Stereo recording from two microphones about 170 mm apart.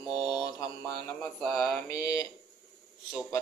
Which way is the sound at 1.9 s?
20° left (ahead or behind).